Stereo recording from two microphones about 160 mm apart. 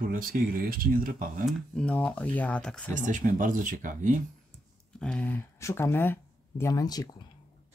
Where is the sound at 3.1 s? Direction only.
55° right (ahead or behind).